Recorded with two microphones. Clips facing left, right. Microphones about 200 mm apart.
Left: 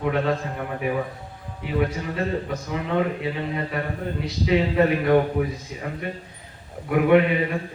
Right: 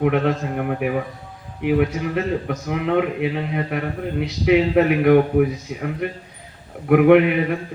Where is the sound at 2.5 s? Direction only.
65° right (ahead or behind).